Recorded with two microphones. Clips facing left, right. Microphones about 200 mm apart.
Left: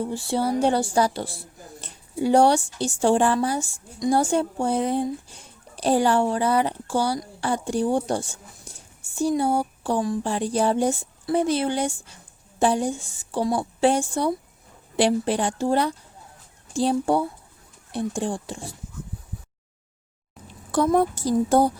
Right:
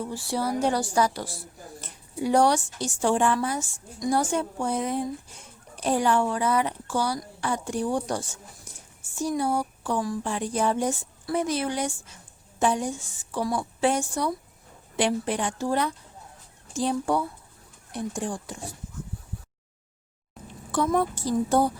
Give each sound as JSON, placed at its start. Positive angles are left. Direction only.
{"t": 0.0, "sound": "speech", "side_deg": 25}
{"t": 20.7, "sound": "speech", "side_deg": 40}